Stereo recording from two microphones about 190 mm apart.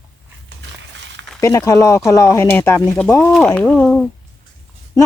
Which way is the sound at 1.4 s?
15° left (ahead or behind).